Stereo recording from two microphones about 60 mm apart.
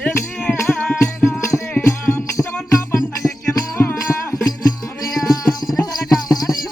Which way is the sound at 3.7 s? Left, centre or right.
Left.